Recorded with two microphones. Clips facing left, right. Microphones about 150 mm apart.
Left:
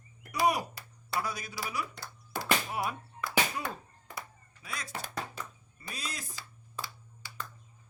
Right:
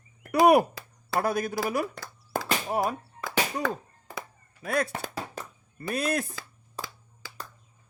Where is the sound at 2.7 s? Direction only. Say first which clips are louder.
Right 7 dB; 40° right (ahead or behind).